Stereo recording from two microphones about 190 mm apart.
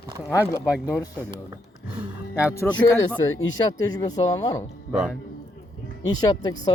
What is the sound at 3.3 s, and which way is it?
Speech, 90° left.